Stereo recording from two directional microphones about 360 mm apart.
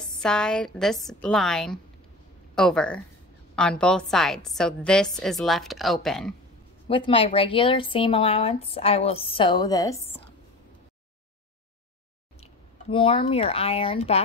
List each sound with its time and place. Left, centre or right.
0.2 s a woman's voice: centre
6.9 s speech: centre
12.9 s speech: centre